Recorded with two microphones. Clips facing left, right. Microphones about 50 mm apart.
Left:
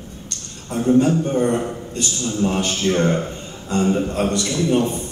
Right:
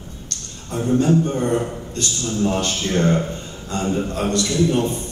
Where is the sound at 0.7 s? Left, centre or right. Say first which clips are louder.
Left 1 dB; centre.